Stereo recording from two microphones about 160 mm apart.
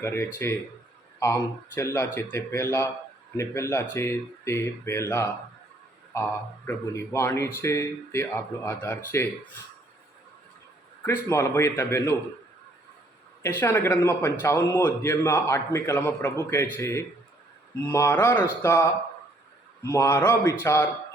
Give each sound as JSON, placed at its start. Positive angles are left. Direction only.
{"t": 0.0, "sound": "speech", "side_deg": 15}
{"t": 6.7, "sound": "speech", "side_deg": 15}
{"t": 11.0, "sound": "speech", "side_deg": 15}
{"t": 13.4, "sound": "speech", "side_deg": 15}